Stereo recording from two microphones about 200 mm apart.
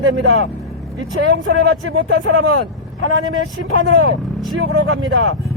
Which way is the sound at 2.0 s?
55° right (ahead or behind).